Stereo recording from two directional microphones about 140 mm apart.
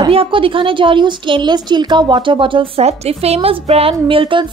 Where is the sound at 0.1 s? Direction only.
40° right (ahead or behind).